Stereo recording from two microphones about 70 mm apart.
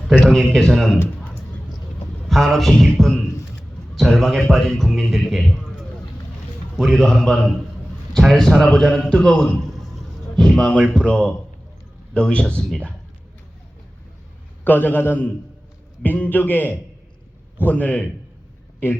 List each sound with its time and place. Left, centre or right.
0.1 s a man's voice: centre
2.3 s a man's voice: centre
6.7 s a man's voice: centre
10.3 s speech: centre
10.8 s speech: centre
11.0 s a man's voice: centre
14.6 s a man's voice: left